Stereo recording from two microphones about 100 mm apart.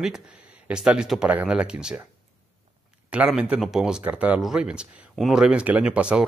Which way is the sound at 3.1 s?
10° right (ahead or behind).